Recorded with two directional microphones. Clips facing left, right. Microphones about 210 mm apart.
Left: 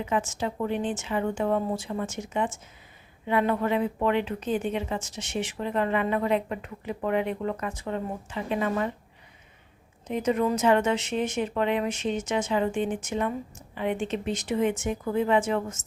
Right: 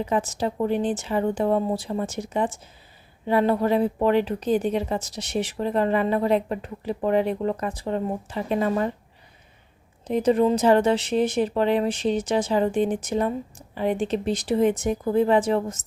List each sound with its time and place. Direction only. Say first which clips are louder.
0.0 s speech: right 4 dB; 35° right (ahead or behind)
10.1 s speech: right 5 dB; 35° right (ahead or behind)